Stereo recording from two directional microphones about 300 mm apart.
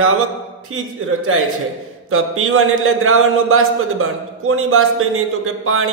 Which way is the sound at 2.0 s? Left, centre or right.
Right.